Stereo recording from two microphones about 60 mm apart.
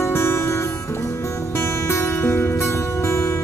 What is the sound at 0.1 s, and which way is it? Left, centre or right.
Music, left.